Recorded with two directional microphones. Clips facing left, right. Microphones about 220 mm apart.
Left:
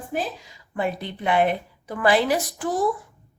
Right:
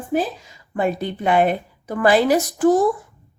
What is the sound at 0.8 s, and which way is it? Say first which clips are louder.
A woman's voice: right 5 dB; 45° right (ahead or behind).